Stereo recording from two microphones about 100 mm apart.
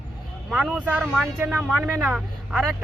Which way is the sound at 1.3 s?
20° right (ahead or behind).